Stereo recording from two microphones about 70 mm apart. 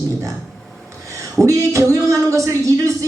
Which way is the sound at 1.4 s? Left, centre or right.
Right.